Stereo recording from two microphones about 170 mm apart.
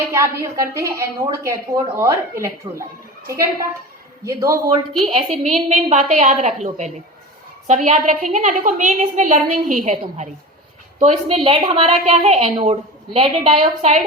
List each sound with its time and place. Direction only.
0.1 s a woman's voice: 15° right (ahead or behind)
4.3 s a man's voice: 20° right (ahead or behind)
5.0 s a woman's voice: 35° right (ahead or behind)